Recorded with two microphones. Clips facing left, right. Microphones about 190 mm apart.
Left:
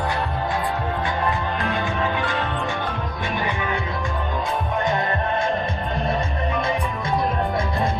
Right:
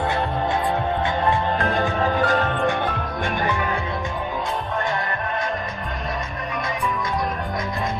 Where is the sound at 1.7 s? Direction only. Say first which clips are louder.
Right 3 dB; 40° right (ahead or behind).